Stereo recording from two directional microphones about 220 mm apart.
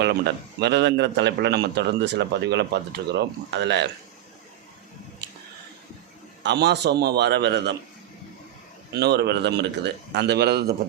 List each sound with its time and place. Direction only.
0.0 s a man's voice: 50° right (ahead or behind)
6.4 s a man's voice: 50° right (ahead or behind)
8.9 s a man's voice: 50° right (ahead or behind)